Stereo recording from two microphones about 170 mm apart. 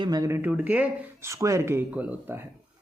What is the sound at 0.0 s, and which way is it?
Speech, 20° right (ahead or behind).